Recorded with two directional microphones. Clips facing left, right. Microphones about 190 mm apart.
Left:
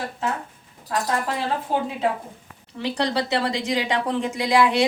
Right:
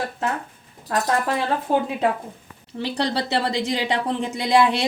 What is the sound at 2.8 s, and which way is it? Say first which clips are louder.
A woman's voice: even; 30° right (ahead or behind).